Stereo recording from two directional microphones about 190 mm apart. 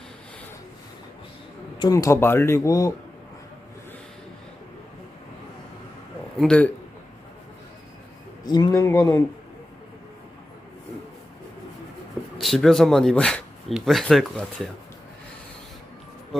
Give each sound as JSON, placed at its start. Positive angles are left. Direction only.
{"t": 1.8, "sound": "speech", "side_deg": 15}
{"t": 6.4, "sound": "speech", "side_deg": 5}
{"t": 8.4, "sound": "speech", "side_deg": 20}
{"t": 12.4, "sound": "speech", "side_deg": 0}